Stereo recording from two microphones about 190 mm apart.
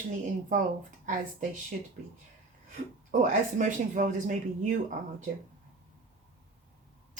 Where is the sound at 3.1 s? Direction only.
40° right (ahead or behind).